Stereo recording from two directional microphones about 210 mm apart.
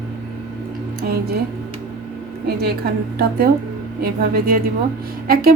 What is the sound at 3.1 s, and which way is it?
A woman's voice, 45° right (ahead or behind).